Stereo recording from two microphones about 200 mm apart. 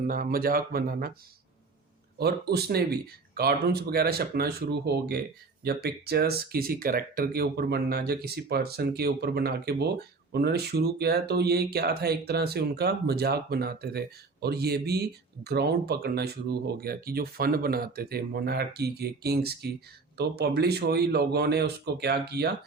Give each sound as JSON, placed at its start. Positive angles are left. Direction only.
{"t": 0.1, "sound": "speech", "side_deg": -45}
{"t": 2.1, "sound": "speech", "side_deg": -50}